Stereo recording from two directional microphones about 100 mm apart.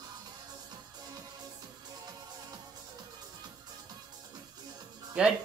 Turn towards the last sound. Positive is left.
turn(degrees=-10)  # may be behind; listen again after turning